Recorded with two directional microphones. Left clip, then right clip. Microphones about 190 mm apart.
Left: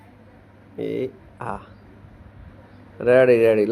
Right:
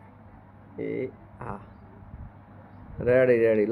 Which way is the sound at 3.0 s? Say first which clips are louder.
Left 6 dB; 30° left (ahead or behind).